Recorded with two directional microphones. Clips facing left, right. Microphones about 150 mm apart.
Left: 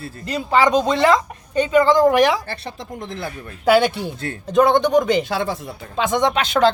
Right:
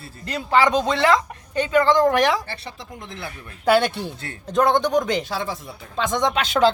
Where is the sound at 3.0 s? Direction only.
40° left (ahead or behind).